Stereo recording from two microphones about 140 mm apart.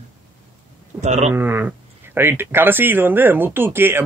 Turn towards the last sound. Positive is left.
turn(degrees=-15)  # may be behind; listen again after turning